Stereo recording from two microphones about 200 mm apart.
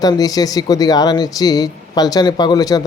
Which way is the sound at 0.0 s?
20° left (ahead or behind).